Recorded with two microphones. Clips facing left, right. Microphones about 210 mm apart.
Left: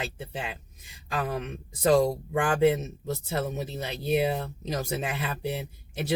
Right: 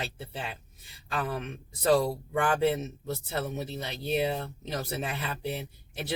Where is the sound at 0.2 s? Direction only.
15° left (ahead or behind).